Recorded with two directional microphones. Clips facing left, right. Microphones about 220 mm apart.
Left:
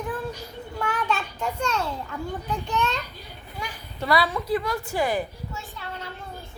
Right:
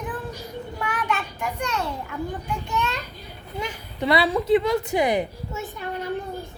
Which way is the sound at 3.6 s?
20° right (ahead or behind).